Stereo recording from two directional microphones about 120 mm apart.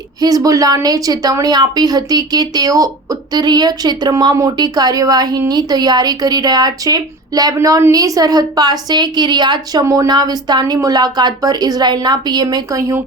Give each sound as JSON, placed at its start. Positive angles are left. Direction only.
{"t": 0.2, "sound": "a woman's voice", "side_deg": -30}
{"t": 9.8, "sound": "speech", "side_deg": -25}
{"t": 10.1, "sound": "a woman's voice", "side_deg": -35}